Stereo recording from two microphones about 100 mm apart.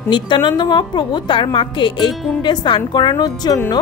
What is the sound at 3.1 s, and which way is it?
Speech, 40° left (ahead or behind).